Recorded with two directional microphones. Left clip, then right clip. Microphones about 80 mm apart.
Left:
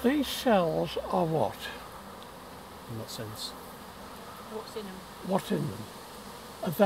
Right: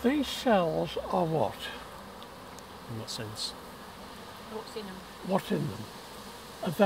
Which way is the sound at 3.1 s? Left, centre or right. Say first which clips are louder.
Right 4 dB; right.